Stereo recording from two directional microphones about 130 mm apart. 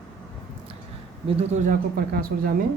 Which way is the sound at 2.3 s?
90° right.